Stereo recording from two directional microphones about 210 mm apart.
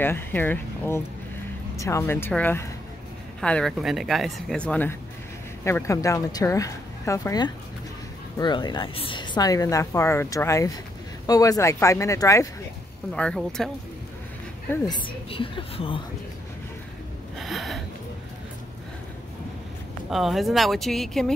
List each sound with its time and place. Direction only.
0.0 s a woman's voice: 10° left (ahead or behind)
13.1 s speech: 5° left (ahead or behind)
14.7 s a woman's voice: 20° left (ahead or behind)
17.4 s a sound: centre (ahead or behind)
20.1 s speech: centre (ahead or behind)